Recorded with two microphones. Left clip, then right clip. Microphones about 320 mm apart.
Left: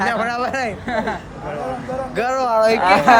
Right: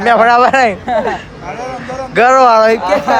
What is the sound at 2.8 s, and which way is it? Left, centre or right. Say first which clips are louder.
Speech: even; left.